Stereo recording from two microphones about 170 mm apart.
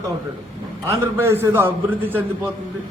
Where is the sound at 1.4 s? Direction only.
15° right (ahead or behind).